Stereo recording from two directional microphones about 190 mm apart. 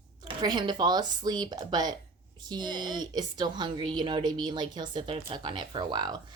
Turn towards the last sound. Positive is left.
turn(degrees=-20)  # may be behind; listen again after turning